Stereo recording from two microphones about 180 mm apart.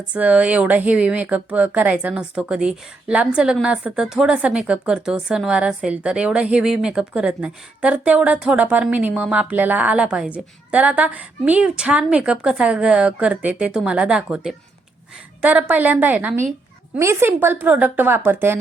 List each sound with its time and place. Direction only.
0.1 s speech: 5° right (ahead or behind)